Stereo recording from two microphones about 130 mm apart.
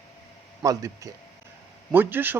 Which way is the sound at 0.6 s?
25° right (ahead or behind).